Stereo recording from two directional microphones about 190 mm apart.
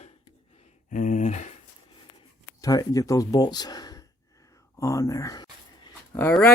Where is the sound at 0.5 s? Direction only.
40° left (ahead or behind).